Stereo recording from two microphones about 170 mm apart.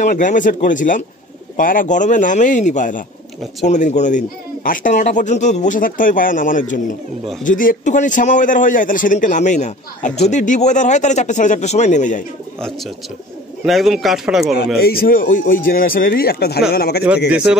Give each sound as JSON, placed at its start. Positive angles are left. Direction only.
{"t": 0.0, "sound": "speech", "side_deg": 50}
{"t": 13.7, "sound": "a man's voice", "side_deg": 0}
{"t": 14.8, "sound": "speech", "side_deg": 60}
{"t": 17.3, "sound": "a man's voice", "side_deg": -5}